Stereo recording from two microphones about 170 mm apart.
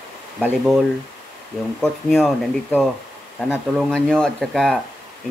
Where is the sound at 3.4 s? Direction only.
Centre (ahead or behind).